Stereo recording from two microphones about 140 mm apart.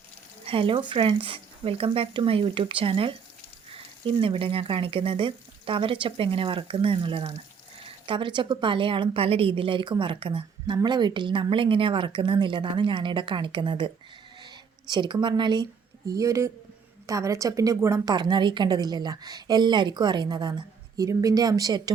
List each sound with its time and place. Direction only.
0.4 s a woman's voice: 40° right (ahead or behind)